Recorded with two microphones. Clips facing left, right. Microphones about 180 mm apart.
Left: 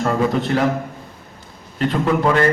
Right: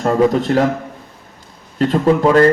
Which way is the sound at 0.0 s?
40° right (ahead or behind).